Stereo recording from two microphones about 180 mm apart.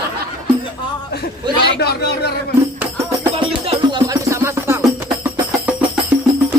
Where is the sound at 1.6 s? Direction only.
65° left (ahead or behind).